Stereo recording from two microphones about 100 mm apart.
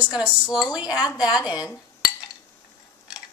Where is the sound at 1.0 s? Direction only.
40° left (ahead or behind).